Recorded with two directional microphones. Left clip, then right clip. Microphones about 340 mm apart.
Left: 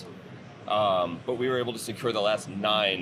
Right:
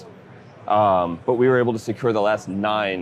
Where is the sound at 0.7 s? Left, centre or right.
Right.